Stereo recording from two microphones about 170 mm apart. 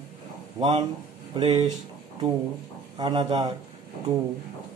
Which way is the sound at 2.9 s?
30° right (ahead or behind).